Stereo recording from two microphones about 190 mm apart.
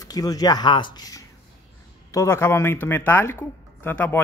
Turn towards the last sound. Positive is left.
turn(degrees=10)  # may be behind; listen again after turning